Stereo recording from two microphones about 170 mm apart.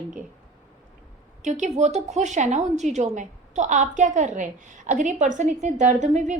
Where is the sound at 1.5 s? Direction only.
45° right (ahead or behind).